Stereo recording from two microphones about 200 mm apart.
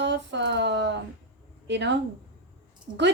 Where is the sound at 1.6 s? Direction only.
60° right (ahead or behind).